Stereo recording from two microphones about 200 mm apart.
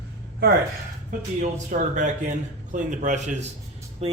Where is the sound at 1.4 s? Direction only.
40° right (ahead or behind).